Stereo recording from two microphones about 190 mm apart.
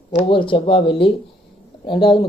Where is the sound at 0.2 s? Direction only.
25° left (ahead or behind).